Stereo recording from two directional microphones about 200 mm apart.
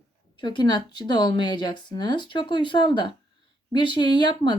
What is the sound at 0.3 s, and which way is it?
Speech, 20° left (ahead or behind).